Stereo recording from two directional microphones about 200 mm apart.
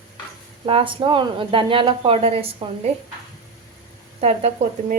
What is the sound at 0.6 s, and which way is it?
A woman's voice, 25° right (ahead or behind).